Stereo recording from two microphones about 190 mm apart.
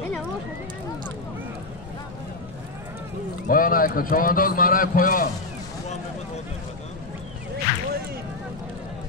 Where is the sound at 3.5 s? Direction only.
45° left (ahead or behind).